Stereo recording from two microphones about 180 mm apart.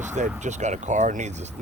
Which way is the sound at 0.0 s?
40° right (ahead or behind).